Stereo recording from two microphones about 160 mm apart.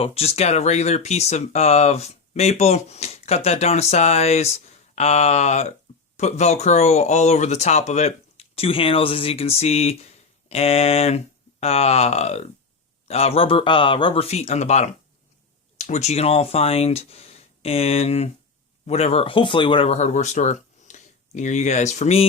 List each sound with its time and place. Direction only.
0.0 s speech: 40° left (ahead or behind)